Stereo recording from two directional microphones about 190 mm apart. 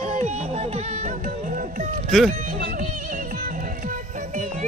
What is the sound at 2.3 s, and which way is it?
Music, 45° right (ahead or behind).